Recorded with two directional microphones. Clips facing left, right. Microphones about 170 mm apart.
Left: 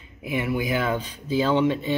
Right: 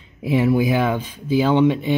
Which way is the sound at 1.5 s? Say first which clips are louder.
Right 5 dB; 15° right (ahead or behind).